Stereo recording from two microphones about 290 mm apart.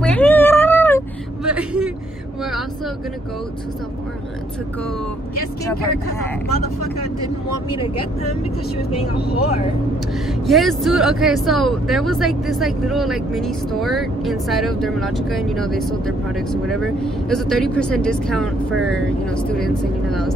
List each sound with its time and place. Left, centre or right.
0.0 s a sound: centre
1.5 s vehicle: centre
7.7 s speech: centre
9.1 s speech: left
10.4 s speech: centre